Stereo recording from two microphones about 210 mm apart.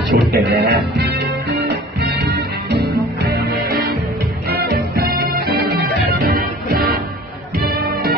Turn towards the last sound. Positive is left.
turn(degrees=-45)  # may be behind; listen again after turning